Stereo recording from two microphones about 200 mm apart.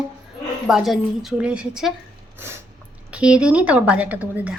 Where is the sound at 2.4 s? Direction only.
10° right (ahead or behind).